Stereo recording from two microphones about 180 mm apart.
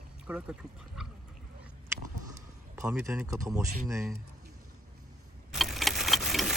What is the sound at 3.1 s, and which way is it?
Speech, 15° right (ahead or behind).